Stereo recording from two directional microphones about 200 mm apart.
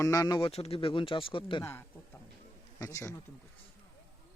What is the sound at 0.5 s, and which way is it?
Speech, 30° left (ahead or behind).